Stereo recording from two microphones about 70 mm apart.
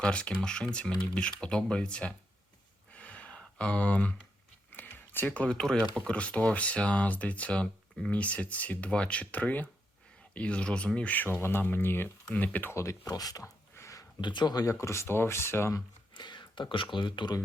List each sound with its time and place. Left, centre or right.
0.0 s speech: centre
2.9 s a sound: centre
4.7 s a sound: left
5.3 s speech: centre
5.5 s speech: centre
6.1 s speech: centre
11.3 s speech: left
12.7 s speech: left
13.1 s speech: left
13.4 s a sound: left
14.2 s speech: left
14.7 s speech: left
15.0 s speech: left
15.7 s a sound: left